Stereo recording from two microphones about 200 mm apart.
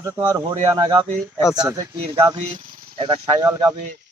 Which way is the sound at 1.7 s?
20° right (ahead or behind).